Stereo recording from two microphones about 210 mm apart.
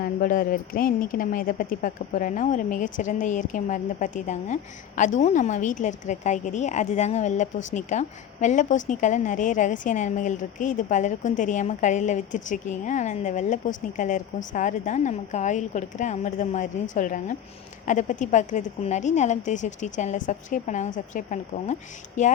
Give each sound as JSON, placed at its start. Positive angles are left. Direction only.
{"t": 0.0, "sound": "a woman's voice", "side_deg": 40}